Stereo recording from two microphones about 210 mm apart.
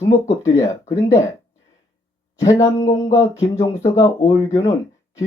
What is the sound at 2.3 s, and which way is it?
Speech, 15° left (ahead or behind).